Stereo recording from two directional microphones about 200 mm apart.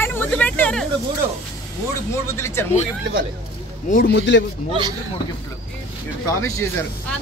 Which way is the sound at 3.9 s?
55° left (ahead or behind).